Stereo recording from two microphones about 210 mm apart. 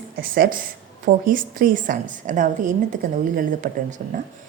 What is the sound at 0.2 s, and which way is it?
A woman's voice, 45° right (ahead or behind).